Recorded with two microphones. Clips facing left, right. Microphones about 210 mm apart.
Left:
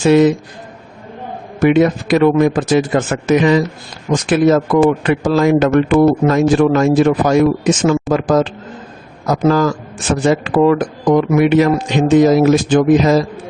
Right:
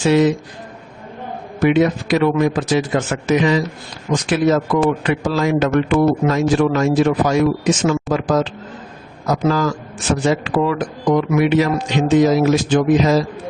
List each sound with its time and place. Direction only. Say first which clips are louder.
0.0 s a man's voice: left 4 dB; 55° left (ahead or behind)
1.5 s a man's voice: left 3 dB; 50° left (ahead or behind)